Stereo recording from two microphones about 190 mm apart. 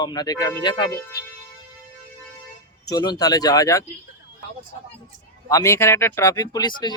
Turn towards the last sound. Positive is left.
turn(degrees=20)  # may be behind; listen again after turning